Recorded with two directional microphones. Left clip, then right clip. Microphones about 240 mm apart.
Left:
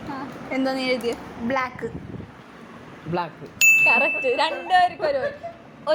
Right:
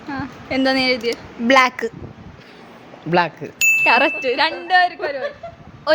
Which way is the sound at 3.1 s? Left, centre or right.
Right.